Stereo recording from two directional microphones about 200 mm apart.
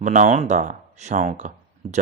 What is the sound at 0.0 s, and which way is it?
Speech, 40° right (ahead or behind).